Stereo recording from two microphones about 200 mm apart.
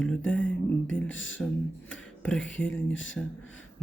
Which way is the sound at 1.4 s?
5° left (ahead or behind).